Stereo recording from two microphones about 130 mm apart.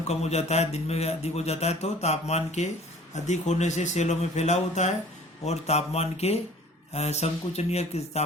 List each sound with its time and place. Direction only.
0.1 s speech: 55° left (ahead or behind)